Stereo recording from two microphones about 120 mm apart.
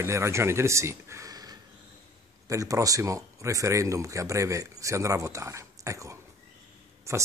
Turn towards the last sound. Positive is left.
turn(degrees=-25)  # may be behind; listen again after turning